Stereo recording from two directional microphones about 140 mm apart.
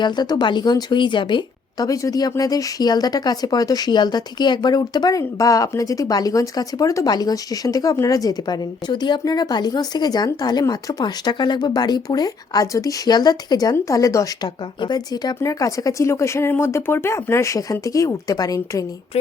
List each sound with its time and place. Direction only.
0.0 s a woman's voice: 30° left (ahead or behind)